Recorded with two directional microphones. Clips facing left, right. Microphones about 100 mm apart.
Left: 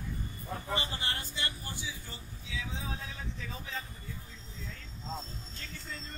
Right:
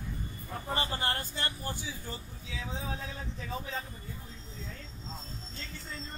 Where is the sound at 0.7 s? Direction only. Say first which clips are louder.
Right 4 dB; 40° right (ahead or behind).